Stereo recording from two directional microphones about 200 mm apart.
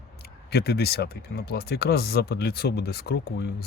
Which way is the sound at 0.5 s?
55° left (ahead or behind).